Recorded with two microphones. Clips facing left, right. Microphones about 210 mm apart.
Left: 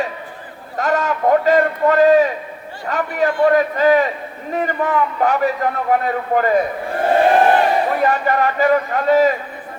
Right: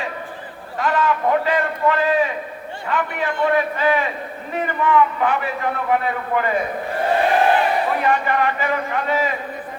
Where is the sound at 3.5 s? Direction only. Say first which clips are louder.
Left 3 dB; 40° left (ahead or behind).